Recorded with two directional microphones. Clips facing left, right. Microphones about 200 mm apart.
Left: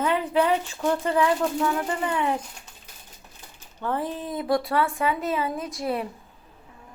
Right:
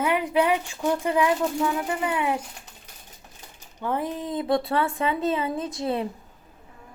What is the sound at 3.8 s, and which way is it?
Speech, 15° right (ahead or behind).